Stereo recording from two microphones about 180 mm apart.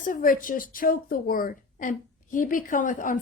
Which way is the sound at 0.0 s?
50° left (ahead or behind).